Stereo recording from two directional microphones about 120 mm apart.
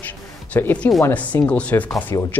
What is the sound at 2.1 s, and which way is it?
Speech, 30° left (ahead or behind).